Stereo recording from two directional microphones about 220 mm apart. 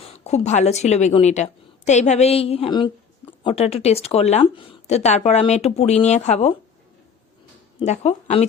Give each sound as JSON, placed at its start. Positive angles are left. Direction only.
{"t": 0.0, "sound": "a woman's voice", "side_deg": 30}
{"t": 7.8, "sound": "a woman's voice", "side_deg": 30}